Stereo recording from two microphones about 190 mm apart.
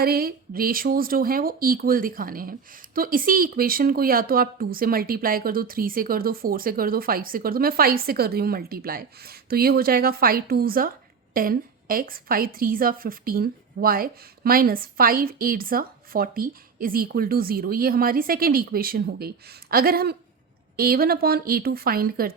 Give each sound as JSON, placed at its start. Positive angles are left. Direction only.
{"t": 0.0, "sound": "speech", "side_deg": -55}